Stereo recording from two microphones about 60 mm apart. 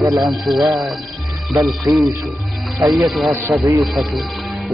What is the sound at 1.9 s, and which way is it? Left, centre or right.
Speech, right.